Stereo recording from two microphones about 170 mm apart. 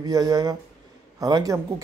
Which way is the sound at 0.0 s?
20° right (ahead or behind).